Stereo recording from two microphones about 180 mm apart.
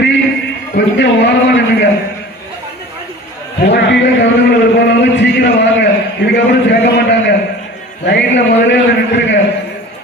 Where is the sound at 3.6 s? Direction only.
75° left (ahead or behind).